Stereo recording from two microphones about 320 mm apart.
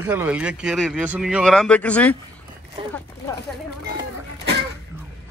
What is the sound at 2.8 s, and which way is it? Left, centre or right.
Speech, centre.